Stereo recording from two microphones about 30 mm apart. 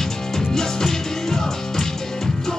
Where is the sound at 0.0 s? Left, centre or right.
Centre.